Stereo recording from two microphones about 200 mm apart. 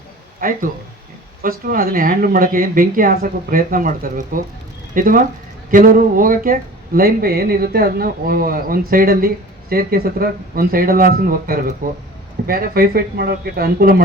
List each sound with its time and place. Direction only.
0.3 s speech: 45° right (ahead or behind)